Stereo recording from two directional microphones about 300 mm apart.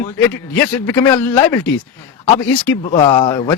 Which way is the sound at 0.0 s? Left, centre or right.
Centre.